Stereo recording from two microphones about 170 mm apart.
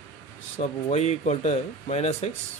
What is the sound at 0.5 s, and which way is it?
Speech, 40° left (ahead or behind).